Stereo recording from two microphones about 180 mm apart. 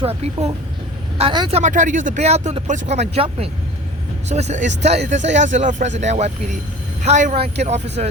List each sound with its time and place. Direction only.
0.0 s speech: 35° right (ahead or behind)
1.5 s speech: 45° right (ahead or behind)